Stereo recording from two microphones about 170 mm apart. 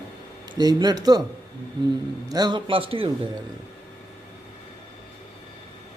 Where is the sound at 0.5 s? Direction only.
25° right (ahead or behind).